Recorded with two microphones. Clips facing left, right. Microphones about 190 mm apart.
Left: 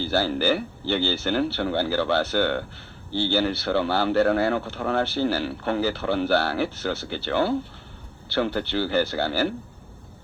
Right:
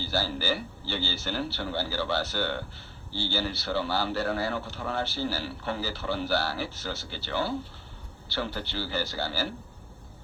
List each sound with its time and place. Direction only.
0.0 s a man's voice: 60° left (ahead or behind)